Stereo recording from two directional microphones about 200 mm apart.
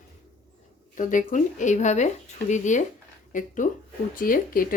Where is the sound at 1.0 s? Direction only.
40° left (ahead or behind).